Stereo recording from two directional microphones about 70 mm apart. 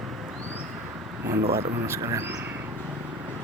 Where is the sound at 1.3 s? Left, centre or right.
Right.